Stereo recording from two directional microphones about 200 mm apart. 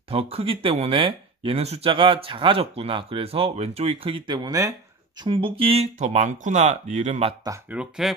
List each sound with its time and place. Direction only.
0.1 s speech: 30° right (ahead or behind)
7.4 s speech: 5° right (ahead or behind)